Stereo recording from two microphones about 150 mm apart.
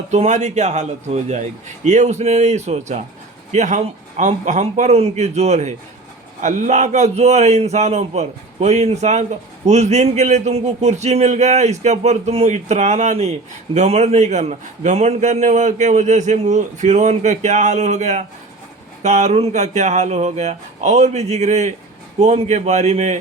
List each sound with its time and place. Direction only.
0.1 s a man's voice: 50° right (ahead or behind)